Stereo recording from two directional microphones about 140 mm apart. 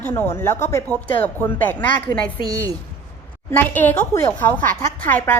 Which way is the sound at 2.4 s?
25° right (ahead or behind).